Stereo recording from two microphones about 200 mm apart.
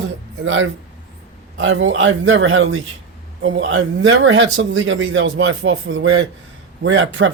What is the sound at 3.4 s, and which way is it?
Speech, 65° right (ahead or behind).